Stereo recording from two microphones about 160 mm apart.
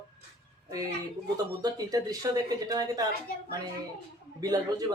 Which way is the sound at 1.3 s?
25° right (ahead or behind).